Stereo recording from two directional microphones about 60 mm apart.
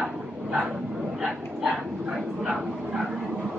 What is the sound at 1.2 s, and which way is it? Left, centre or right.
Dog, centre.